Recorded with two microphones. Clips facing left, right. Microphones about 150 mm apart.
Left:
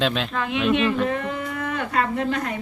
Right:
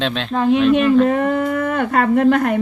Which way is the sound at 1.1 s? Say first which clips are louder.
Right 10 dB; 50° right (ahead or behind).